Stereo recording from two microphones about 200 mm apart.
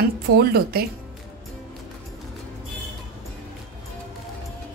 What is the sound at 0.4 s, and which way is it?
Speech, 50° right (ahead or behind).